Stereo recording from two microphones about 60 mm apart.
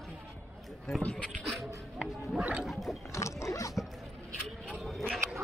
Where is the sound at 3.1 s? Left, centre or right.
Left.